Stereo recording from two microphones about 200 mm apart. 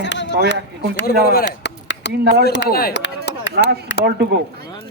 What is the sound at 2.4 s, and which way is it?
Chop, 55° left (ahead or behind).